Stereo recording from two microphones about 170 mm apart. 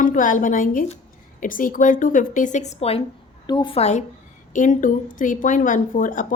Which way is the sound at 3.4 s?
25° left (ahead or behind).